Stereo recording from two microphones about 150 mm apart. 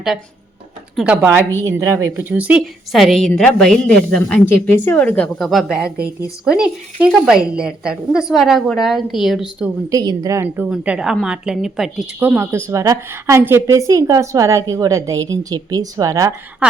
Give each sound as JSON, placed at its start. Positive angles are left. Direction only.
{"t": 0.9, "sound": "a woman's voice", "side_deg": -5}
{"t": 9.9, "sound": "a woman's voice", "side_deg": -25}
{"t": 12.2, "sound": "a woman's voice", "side_deg": -15}